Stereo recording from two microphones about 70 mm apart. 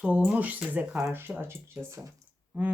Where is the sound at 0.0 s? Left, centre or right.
Centre; by 2.0 s right.